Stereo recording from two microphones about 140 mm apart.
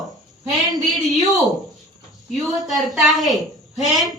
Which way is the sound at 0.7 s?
25° right (ahead or behind).